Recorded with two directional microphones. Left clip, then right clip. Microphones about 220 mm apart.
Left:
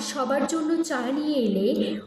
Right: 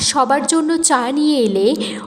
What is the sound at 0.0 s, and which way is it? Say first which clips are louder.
A woman's voice: right 10 dB; 40° right (ahead or behind).